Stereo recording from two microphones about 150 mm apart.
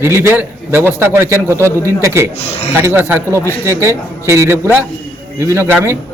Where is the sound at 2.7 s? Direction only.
15° right (ahead or behind).